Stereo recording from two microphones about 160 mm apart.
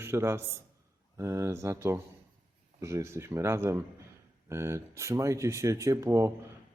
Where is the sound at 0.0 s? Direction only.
15° right (ahead or behind).